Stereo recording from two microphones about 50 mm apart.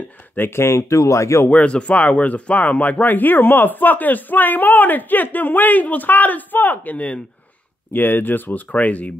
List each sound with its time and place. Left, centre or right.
0.4 s speech: left
1.5 s speech: left
7.9 s speech: left